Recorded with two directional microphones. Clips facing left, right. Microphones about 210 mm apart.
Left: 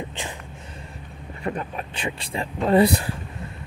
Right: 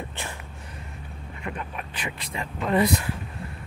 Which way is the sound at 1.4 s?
35° left (ahead or behind).